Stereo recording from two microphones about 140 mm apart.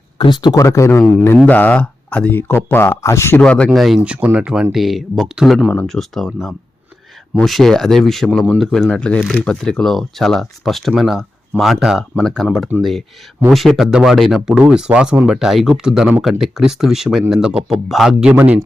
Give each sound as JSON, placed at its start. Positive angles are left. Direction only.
{"t": 0.2, "sound": "speech", "side_deg": 35}
{"t": 3.4, "sound": "speech", "side_deg": 10}